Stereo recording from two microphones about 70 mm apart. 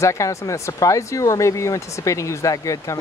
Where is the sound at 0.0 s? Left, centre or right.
Left.